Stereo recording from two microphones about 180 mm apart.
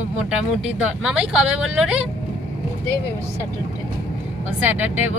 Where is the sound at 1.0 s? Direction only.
5° right (ahead or behind).